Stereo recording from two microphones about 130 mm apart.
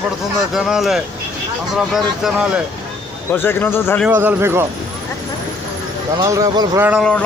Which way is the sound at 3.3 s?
15° left (ahead or behind).